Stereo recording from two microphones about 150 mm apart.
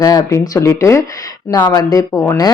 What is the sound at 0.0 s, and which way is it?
Speech, 25° left (ahead or behind).